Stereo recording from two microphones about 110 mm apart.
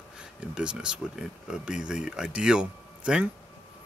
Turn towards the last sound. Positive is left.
turn(degrees=-10)  # may be behind; listen again after turning